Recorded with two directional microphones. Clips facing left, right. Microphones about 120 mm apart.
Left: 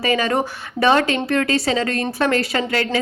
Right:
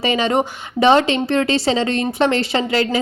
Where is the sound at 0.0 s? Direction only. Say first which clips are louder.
Right 2 dB; 25° right (ahead or behind).